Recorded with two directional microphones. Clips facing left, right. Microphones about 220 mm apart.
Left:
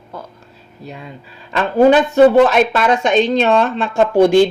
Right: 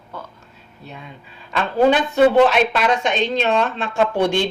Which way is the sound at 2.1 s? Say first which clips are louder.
Left 4 dB; 45° left (ahead or behind).